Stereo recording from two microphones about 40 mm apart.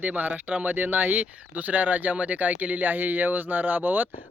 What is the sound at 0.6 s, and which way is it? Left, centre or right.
Speech, right.